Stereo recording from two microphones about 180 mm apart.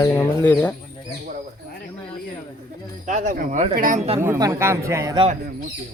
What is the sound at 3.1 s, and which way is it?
Speech, 45° right (ahead or behind).